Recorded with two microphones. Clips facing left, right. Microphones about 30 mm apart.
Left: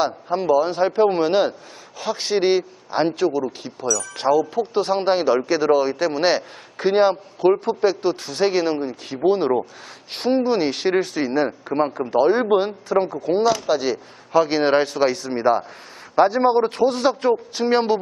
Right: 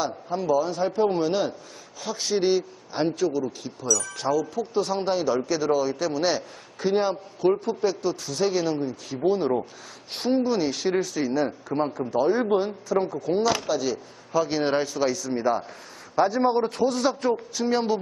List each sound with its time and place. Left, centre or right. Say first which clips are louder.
0.0 s a man's voice: left 6 dB; left
3.8 s speech: left 2 dB; centre
4.2 s a man's voice: left 6 dB; left
16.6 s a man's voice: left 5 dB; left